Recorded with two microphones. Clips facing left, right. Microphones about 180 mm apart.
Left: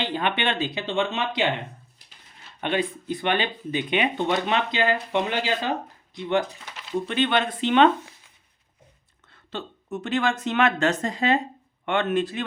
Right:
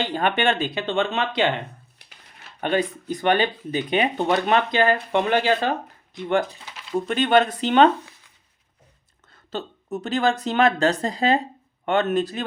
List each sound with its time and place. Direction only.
0.0 s speech: 45° right (ahead or behind)
2.0 s a sound: 65° right (ahead or behind)
2.6 s speech: 40° right (ahead or behind)
7.1 s speech: 45° right (ahead or behind)
9.3 s speech: 40° right (ahead or behind)